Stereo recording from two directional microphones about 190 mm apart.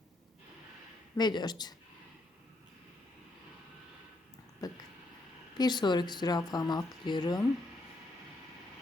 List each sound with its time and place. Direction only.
1.1 s speech: 20° left (ahead or behind)
4.6 s a sound: 20° left (ahead or behind)
5.5 s speech: 20° left (ahead or behind)